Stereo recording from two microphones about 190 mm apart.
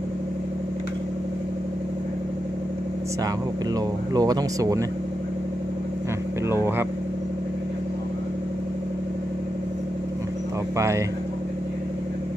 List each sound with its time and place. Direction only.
4.1 s speech: 20° right (ahead or behind)
6.5 s speech: 10° right (ahead or behind)